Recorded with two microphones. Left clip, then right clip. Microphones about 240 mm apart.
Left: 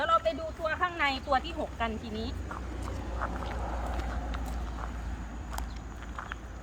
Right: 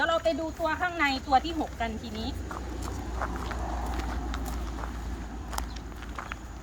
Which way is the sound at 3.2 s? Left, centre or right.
Right.